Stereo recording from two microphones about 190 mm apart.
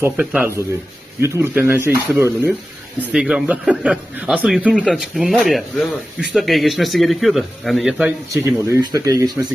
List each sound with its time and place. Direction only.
0.0 s speech: 10° right (ahead or behind)
8.3 s speech: 15° right (ahead or behind)